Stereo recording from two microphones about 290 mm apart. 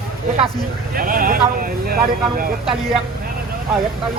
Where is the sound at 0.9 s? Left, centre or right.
Right.